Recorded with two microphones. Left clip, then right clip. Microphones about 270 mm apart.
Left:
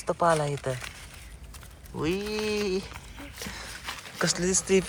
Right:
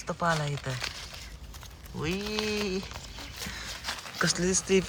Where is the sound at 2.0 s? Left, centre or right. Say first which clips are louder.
Left 2 dB; centre.